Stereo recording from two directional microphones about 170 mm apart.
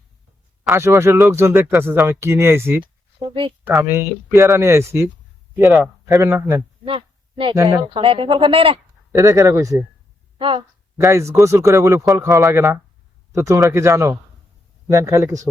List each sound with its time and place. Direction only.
0.7 s speech: 15° right (ahead or behind)
3.2 s speech: 30° right (ahead or behind)
3.8 s speech: 15° right (ahead or behind)
5.6 s speech: centre (ahead or behind)
6.1 s speech: 20° right (ahead or behind)
6.8 s a sound: 30° right (ahead or behind)
7.5 s speech: 20° right (ahead or behind)
7.9 s speech: 30° right (ahead or behind)
9.1 s speech: 20° right (ahead or behind)
10.3 s speech: 30° right (ahead or behind)
11.0 s speech: 15° right (ahead or behind)